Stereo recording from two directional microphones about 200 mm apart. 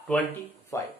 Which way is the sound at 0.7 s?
15° left (ahead or behind).